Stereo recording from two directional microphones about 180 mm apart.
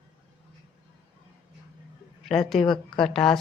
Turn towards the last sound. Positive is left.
turn(degrees=0)  # may be behind; listen again after turning